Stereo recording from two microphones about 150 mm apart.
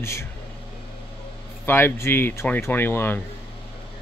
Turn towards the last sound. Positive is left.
turn(degrees=15)  # may be behind; listen again after turning